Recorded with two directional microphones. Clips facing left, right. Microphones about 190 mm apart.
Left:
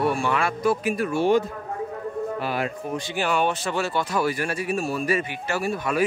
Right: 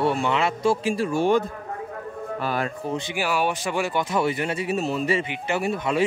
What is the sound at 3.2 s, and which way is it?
Speech, 10° right (ahead or behind).